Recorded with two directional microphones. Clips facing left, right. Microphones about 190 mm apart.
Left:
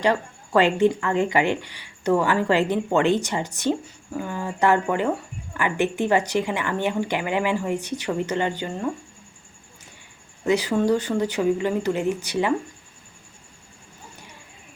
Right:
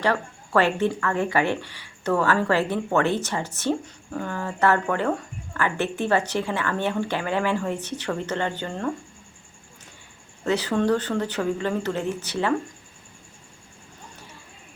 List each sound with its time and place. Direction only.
0.0 s speech: 15° left (ahead or behind)
10.4 s speech: 10° left (ahead or behind)